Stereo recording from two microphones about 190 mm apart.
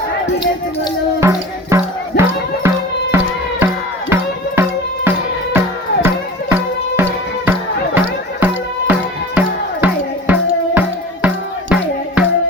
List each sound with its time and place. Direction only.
1.2 s music: 15° right (ahead or behind)
6.5 s music: 10° right (ahead or behind)